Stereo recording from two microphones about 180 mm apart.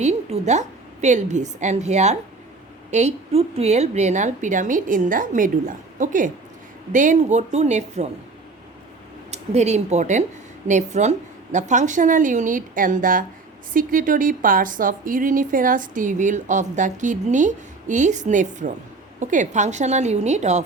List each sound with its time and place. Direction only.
0.0 s a woman's voice: 40° right (ahead or behind)
9.3 s a woman's voice: 40° right (ahead or behind)